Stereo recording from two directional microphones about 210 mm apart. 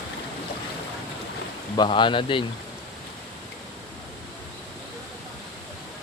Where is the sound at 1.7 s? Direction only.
20° left (ahead or behind).